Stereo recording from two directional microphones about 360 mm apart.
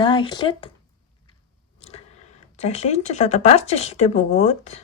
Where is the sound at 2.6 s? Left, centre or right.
Centre.